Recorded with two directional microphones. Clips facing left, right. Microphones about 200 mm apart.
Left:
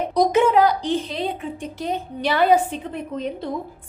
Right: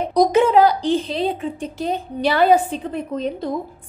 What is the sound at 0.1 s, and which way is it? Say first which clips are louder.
A woman's voice: right 3 dB; 30° right (ahead or behind).